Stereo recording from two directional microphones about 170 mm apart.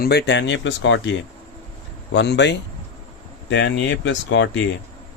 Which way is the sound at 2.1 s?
90° left.